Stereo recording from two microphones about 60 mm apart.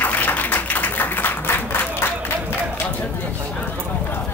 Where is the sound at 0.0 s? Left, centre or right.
Left.